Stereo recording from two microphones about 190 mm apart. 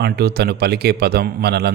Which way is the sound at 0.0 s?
60° right (ahead or behind).